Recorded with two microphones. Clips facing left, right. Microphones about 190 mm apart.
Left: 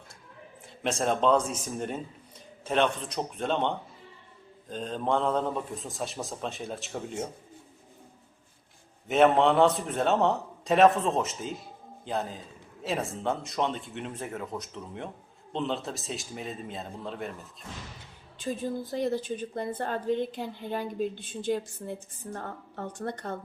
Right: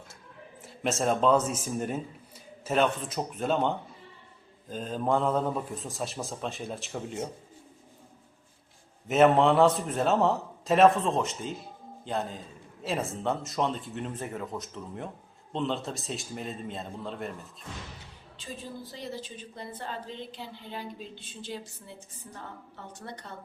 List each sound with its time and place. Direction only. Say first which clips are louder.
0.6 s a man's voice: right 1 dB; 5° right (ahead or behind)
9.0 s a man's voice: right 1 dB; centre (ahead or behind)
18.3 s a woman's voice: left 9 dB; 50° left (ahead or behind)